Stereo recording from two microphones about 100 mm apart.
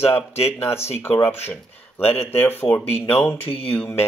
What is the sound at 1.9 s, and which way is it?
Speech, 20° left (ahead or behind).